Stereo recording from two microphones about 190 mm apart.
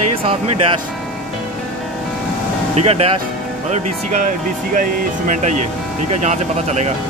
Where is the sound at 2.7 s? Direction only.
35° right (ahead or behind).